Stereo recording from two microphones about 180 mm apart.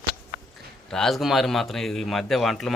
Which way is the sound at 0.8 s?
5° left (ahead or behind).